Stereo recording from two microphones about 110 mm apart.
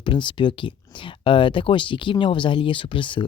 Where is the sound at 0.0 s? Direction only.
50° left (ahead or behind).